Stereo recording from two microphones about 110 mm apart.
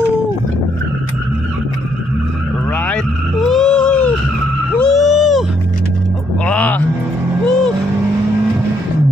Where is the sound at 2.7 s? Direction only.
10° left (ahead or behind).